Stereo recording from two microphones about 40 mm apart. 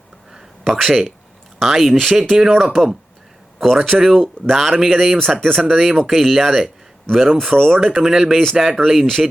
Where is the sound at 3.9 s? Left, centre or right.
Right.